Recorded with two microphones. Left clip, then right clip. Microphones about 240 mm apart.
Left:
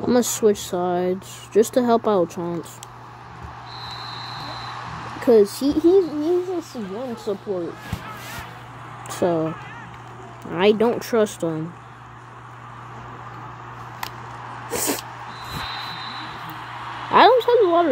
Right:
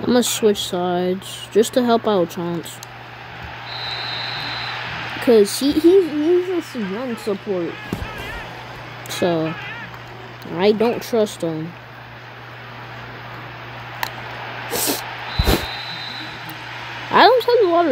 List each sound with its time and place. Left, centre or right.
0.0 s speech: centre
3.7 s a sound: centre
7.3 s speech: right
9.2 s speech: centre
10.5 s speech: centre
14.5 s a sound: centre
16.7 s vehicle: centre